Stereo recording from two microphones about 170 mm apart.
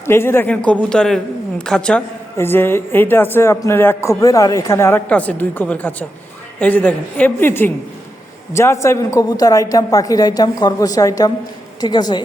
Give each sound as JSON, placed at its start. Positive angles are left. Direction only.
{"t": 0.0, "sound": "a man's voice", "side_deg": 15}